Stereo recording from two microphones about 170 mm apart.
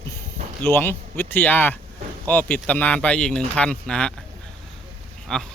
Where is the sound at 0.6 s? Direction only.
15° left (ahead or behind).